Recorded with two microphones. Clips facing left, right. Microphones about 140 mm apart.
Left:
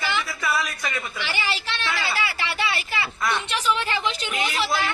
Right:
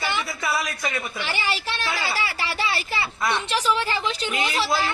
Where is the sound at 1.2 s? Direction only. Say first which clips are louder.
Right 1 dB; 45° right (ahead or behind).